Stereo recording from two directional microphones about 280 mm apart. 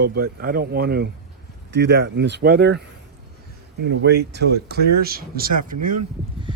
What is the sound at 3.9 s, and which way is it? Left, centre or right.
Speech, right.